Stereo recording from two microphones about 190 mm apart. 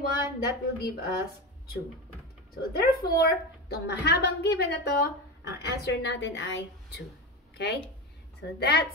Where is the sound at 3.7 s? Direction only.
60° left (ahead or behind).